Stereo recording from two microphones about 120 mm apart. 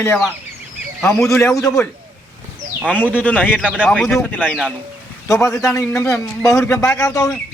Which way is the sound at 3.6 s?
10° right (ahead or behind).